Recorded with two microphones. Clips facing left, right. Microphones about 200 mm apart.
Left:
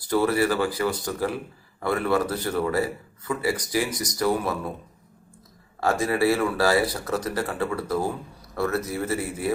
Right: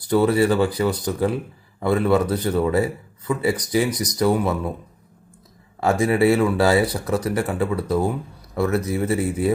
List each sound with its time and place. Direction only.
0.1 s a man's voice: 20° right (ahead or behind)
5.8 s a man's voice: 20° right (ahead or behind)